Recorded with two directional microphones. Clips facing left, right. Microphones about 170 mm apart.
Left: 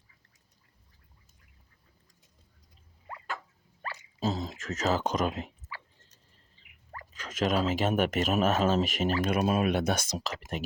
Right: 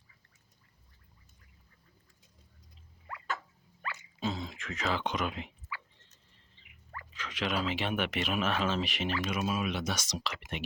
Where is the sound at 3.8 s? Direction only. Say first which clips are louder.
Left 4 dB; 35° left (ahead or behind).